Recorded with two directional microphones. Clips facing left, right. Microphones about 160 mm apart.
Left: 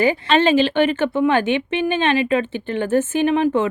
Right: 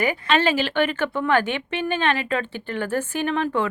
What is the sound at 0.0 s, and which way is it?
Speech, 30° left (ahead or behind).